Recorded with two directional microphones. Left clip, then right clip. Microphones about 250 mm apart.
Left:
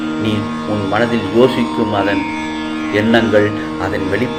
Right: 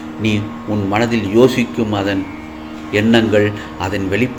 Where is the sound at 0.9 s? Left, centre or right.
Right.